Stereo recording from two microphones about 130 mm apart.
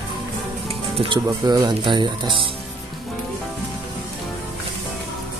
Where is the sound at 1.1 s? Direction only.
35° right (ahead or behind).